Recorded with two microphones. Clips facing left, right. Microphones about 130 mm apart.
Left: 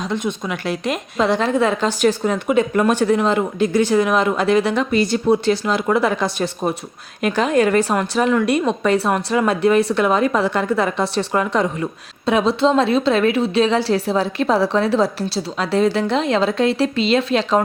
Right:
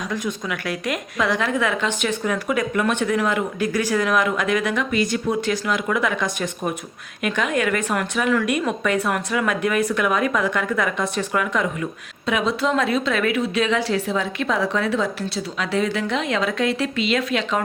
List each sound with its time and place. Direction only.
0.1 s a woman's voice: 25° left (ahead or behind)